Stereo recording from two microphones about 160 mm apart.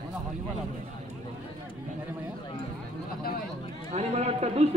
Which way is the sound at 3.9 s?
45° right (ahead or behind).